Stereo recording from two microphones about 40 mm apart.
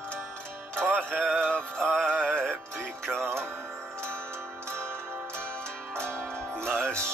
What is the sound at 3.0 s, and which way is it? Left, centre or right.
Music, centre.